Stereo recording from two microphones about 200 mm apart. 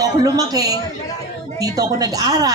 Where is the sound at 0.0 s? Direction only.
20° right (ahead or behind).